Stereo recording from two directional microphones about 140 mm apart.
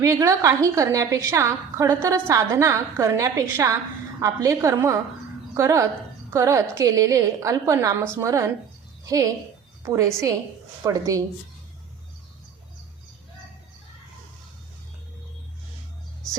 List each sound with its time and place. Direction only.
0.0 s a woman's voice: 20° right (ahead or behind)